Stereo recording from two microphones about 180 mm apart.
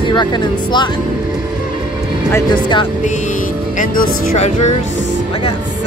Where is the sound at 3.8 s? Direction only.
40° left (ahead or behind).